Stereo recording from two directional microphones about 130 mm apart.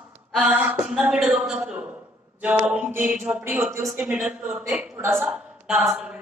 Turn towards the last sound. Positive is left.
turn(degrees=-5)  # may be behind; listen again after turning